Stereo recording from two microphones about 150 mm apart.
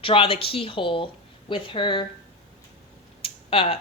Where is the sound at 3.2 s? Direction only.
40° left (ahead or behind).